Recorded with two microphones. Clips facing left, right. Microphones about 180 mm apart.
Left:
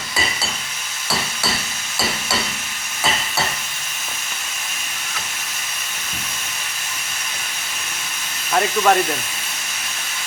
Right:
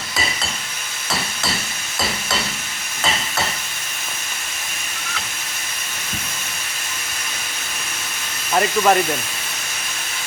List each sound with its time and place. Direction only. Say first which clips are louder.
8.5 s speech: even; 5° right (ahead or behind)